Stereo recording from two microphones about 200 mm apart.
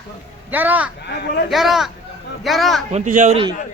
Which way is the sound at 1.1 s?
55° left (ahead or behind).